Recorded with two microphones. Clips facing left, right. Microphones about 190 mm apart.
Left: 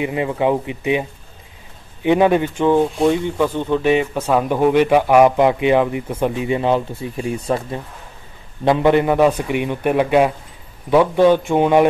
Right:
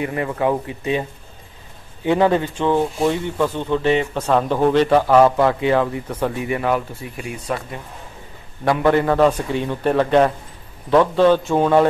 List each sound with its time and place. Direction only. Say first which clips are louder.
0.0 s speech: left 2 dB; 15° left (ahead or behind)
2.0 s speech: left 2 dB; 15° left (ahead or behind)